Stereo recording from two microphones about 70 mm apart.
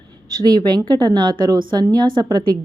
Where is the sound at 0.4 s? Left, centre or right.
Right.